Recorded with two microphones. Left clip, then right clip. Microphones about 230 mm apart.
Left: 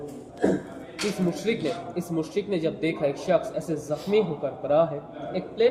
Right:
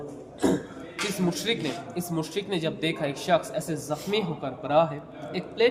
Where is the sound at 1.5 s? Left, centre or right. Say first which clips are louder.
Left 2 dB; right.